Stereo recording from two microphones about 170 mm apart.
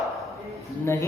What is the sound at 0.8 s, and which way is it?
Speech, 15° left (ahead or behind).